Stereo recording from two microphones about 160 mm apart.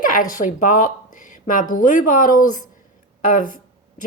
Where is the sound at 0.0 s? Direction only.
55° left (ahead or behind).